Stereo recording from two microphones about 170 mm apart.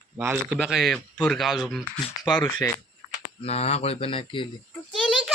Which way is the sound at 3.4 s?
40° left (ahead or behind).